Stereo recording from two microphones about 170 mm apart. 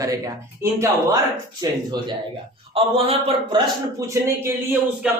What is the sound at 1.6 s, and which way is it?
Speech, 25° right (ahead or behind).